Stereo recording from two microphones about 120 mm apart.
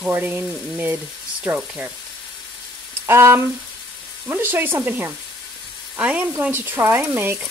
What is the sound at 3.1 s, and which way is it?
Frying, 20° right (ahead or behind).